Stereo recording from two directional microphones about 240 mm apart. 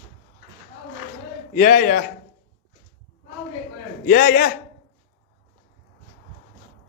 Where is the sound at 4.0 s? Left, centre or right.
Left.